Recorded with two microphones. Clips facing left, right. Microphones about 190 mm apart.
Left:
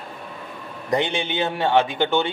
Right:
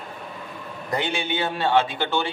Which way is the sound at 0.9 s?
20° left (ahead or behind).